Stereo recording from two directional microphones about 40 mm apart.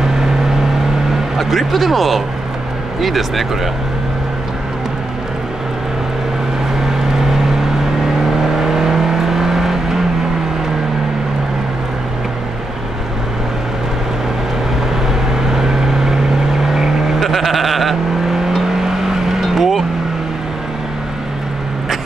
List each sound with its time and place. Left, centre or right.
1.4 s speech: centre
6.8 s vehicle: centre
8.5 s vehicle: centre
15.5 s vehicle: centre
17.2 s bleat: centre
18.3 s vehicle: centre